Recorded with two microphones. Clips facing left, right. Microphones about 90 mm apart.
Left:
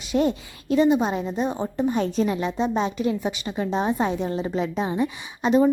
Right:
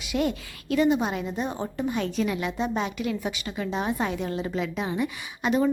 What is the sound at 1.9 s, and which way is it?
A woman's voice, 35° left (ahead or behind).